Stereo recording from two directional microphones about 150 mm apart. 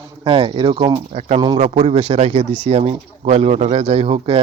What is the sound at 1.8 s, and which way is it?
Speech, 40° right (ahead or behind).